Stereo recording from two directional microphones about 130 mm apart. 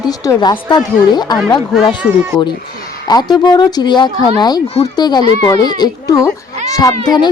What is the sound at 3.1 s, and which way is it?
Speech, 30° left (ahead or behind).